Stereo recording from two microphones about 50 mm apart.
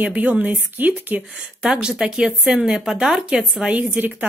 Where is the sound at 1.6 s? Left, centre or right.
Centre.